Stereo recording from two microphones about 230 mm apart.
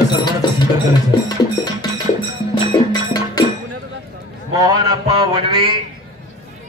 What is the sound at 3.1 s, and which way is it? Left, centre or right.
Cattle, centre.